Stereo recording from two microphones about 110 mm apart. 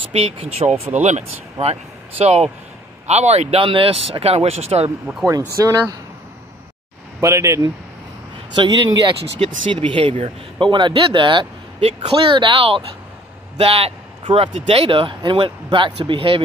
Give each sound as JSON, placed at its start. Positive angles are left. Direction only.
{"t": 0.1, "sound": "speech", "side_deg": -70}
{"t": 0.7, "sound": "speech", "side_deg": -90}
{"t": 5.5, "sound": "speech", "side_deg": -30}
{"t": 7.2, "sound": "speech", "side_deg": -30}
{"t": 8.5, "sound": "speech", "side_deg": -40}
{"t": 9.4, "sound": "speech", "side_deg": -60}
{"t": 11.8, "sound": "speech", "side_deg": -65}